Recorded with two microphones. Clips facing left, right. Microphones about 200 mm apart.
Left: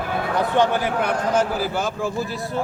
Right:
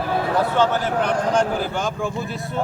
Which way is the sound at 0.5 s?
15° left (ahead or behind).